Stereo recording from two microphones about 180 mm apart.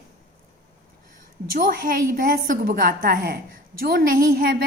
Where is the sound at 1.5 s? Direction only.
50° right (ahead or behind).